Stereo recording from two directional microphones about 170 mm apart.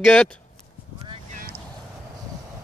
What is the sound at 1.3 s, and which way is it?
Vehicle, 55° right (ahead or behind).